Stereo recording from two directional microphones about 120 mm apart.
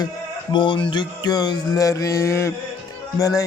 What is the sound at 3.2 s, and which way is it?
Speech, 30° left (ahead or behind).